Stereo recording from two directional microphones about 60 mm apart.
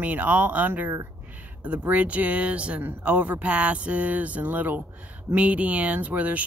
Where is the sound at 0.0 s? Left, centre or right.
Right.